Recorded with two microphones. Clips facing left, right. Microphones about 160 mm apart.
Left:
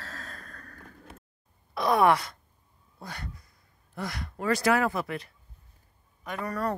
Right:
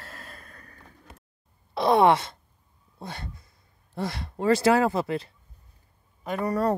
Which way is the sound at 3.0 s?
25° right (ahead or behind).